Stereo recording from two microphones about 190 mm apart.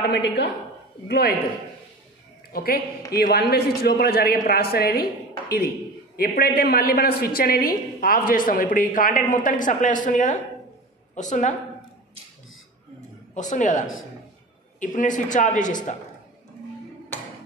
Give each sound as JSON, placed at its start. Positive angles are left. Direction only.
{"t": 0.1, "sound": "a woman's voice", "side_deg": 65}
{"t": 2.5, "sound": "a woman's voice", "side_deg": 50}
{"t": 6.1, "sound": "a woman's voice", "side_deg": 50}
{"t": 13.3, "sound": "a man's voice", "side_deg": 40}